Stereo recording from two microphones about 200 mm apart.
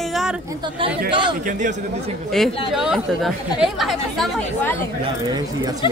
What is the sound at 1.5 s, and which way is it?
Speech, 40° right (ahead or behind).